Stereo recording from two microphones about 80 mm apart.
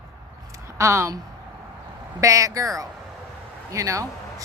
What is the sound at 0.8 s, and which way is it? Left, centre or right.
Speech, right.